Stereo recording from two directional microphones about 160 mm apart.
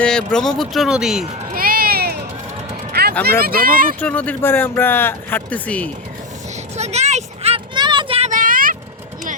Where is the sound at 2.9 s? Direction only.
75° right (ahead or behind).